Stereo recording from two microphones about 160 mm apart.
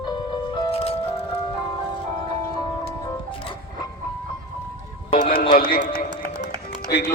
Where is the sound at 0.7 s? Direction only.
40° left (ahead or behind).